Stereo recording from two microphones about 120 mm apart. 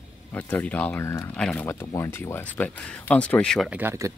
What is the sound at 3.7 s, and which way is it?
Speech, 20° right (ahead or behind).